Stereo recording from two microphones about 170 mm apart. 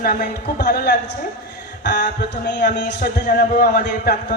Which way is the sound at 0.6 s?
70° left (ahead or behind).